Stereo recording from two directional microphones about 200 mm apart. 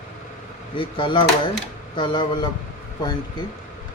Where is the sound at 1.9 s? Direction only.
25° left (ahead or behind).